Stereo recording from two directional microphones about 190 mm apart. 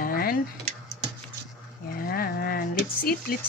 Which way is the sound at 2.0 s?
50° left (ahead or behind).